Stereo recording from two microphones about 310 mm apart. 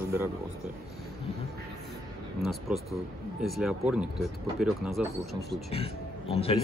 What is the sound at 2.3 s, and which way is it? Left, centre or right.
Speech, centre.